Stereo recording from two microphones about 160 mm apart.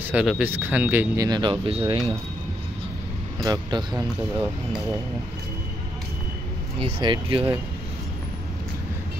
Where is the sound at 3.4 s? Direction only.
25° right (ahead or behind).